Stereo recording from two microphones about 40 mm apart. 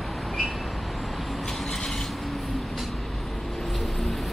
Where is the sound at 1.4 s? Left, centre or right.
Centre.